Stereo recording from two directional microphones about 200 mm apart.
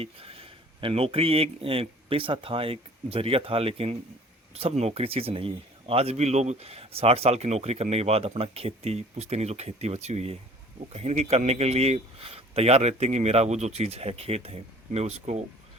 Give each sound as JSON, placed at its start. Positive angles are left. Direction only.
{"t": 0.0, "sound": "speech", "side_deg": -30}